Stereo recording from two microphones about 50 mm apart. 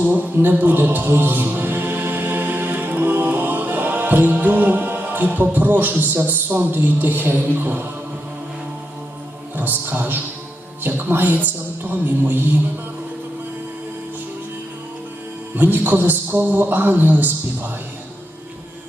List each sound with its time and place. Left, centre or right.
0.0 s a man's voice: right
9.6 s a man's voice: right
15.5 s a man's voice: right